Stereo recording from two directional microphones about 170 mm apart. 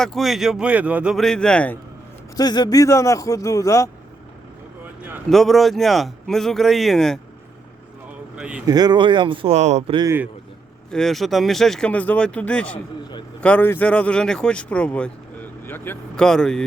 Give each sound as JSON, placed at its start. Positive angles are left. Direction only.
{"t": 0.0, "sound": "a man's voice", "side_deg": 0}
{"t": 2.3, "sound": "speech", "side_deg": 25}
{"t": 5.3, "sound": "a man's voice", "side_deg": 0}
{"t": 8.4, "sound": "speech", "side_deg": -5}
{"t": 8.6, "sound": "speech", "side_deg": -25}
{"t": 10.9, "sound": "a man's voice", "side_deg": 0}